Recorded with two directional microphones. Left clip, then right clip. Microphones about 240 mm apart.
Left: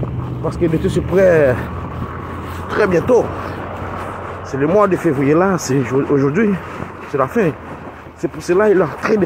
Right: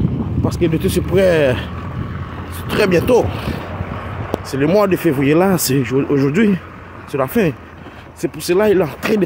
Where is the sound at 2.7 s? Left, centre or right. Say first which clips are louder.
Even; right.